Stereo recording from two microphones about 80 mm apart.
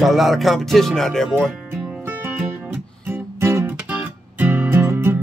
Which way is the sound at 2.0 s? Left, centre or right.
Right.